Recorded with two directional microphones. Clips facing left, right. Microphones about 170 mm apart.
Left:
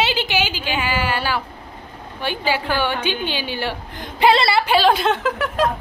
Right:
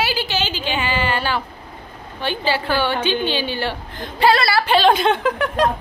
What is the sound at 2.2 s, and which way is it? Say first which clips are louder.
A woman's voice: right 1 dB; 10° left (ahead or behind).